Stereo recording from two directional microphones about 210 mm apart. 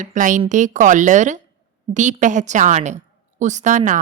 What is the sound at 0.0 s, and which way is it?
Speech, 35° right (ahead or behind).